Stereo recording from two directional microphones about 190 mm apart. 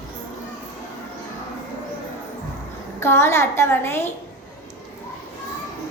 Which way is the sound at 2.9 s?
15° left (ahead or behind).